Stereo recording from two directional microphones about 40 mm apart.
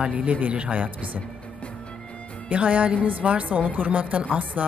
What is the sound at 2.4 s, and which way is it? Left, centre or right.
A woman's voice, right.